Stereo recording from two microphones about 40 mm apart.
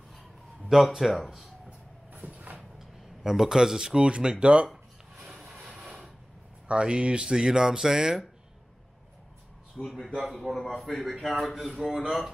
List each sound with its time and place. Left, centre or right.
0.7 s speech: centre
1.7 s vehicle: right
2.8 s speech: centre; by 4.6 s right
5.5 s a sound: centre
6.7 s speech: right
9.8 s speech: centre
10.6 s a man's voice: centre